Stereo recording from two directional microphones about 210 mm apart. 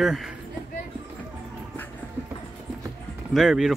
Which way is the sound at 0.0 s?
Centre (ahead or behind).